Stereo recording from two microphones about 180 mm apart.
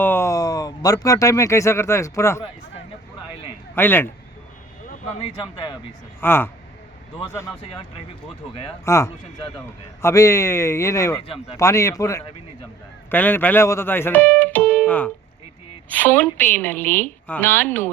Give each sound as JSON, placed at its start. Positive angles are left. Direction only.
{"t": 0.0, "sound": "speech", "side_deg": 15}
{"t": 3.8, "sound": "a woman's voice", "side_deg": 10}
{"t": 6.1, "sound": "a woman's voice", "side_deg": 10}
{"t": 8.8, "sound": "a woman's voice", "side_deg": 15}